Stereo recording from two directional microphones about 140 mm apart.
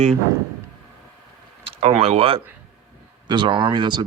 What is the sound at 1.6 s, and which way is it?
Speech, 50° right (ahead or behind).